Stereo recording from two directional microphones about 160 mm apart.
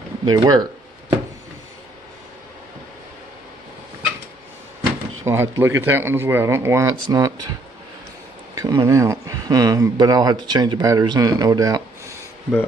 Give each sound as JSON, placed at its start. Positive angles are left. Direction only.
{"t": 0.2, "sound": "speech", "side_deg": -25}
{"t": 5.2, "sound": "speech", "side_deg": -15}
{"t": 8.5, "sound": "speech", "side_deg": -20}